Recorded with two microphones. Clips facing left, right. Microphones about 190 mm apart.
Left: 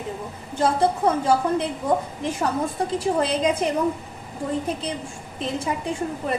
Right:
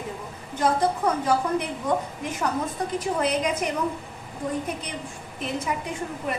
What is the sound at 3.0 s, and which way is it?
Speech, 30° left (ahead or behind).